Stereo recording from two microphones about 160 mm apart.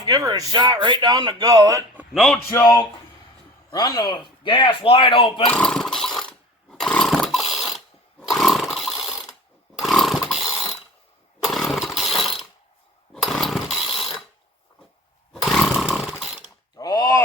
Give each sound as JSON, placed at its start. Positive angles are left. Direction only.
{"t": 0.0, "sound": "speech", "side_deg": -25}
{"t": 2.1, "sound": "a man's voice", "side_deg": 5}
{"t": 2.5, "sound": "speech", "side_deg": 20}
{"t": 5.5, "sound": "a sound", "side_deg": 5}
{"t": 8.2, "sound": "chainsaw", "side_deg": 0}
{"t": 13.2, "sound": "a sound", "side_deg": 0}
{"t": 15.3, "sound": "chainsaw", "side_deg": 0}
{"t": 16.4, "sound": "mechanisms", "side_deg": 25}